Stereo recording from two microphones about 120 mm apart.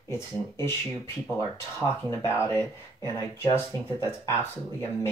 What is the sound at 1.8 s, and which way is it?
Speech, 25° left (ahead or behind).